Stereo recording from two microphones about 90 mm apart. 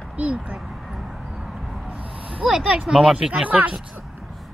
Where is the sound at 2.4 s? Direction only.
10° right (ahead or behind).